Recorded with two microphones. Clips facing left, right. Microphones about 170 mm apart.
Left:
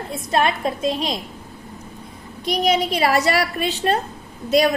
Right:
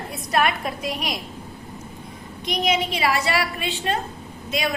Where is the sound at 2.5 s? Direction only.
35° left (ahead or behind).